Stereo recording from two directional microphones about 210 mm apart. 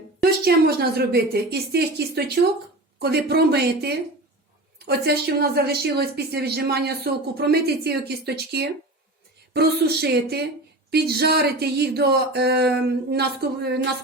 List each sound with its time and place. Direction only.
0.2 s a woman's voice: 50° right (ahead or behind)